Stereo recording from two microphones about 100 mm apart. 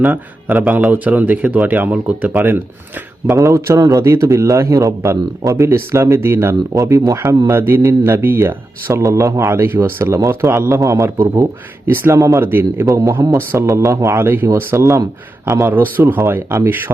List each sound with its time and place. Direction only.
0.0 s a man's voice: 20° right (ahead or behind)
0.5 s speech: 10° right (ahead or behind)
3.3 s a man's voice: 30° right (ahead or behind)
12.8 s a man's voice: 40° right (ahead or behind)
13.3 s a man's voice: 25° right (ahead or behind)